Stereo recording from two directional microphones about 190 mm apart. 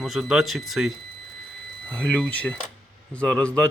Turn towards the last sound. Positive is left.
turn(degrees=5)  # may be behind; listen again after turning